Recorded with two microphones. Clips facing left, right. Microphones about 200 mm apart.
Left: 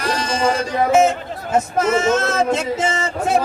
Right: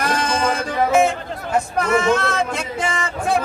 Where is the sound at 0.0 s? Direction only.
55° right (ahead or behind).